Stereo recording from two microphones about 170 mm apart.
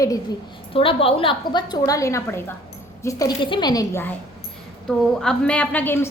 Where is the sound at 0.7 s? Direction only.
30° left (ahead or behind).